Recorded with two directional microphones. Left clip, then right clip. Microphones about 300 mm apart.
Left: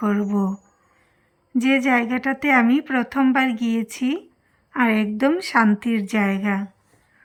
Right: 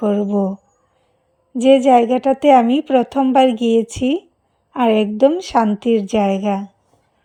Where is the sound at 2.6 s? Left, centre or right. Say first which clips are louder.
Right 5 dB; centre.